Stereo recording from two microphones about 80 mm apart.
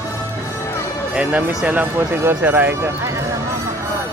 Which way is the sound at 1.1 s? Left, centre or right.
Centre.